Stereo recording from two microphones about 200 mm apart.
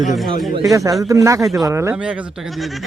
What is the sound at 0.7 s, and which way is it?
Speech, 15° right (ahead or behind).